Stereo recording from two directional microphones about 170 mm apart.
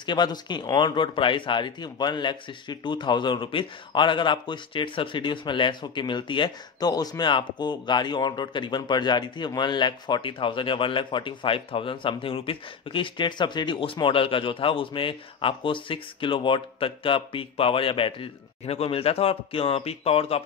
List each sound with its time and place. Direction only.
0.0 s speech: 25° left (ahead or behind)